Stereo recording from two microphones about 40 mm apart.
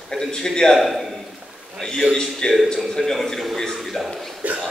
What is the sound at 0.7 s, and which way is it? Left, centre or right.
Speech, centre.